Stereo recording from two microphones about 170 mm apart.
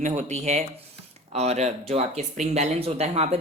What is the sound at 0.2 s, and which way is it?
Speech, 40° right (ahead or behind).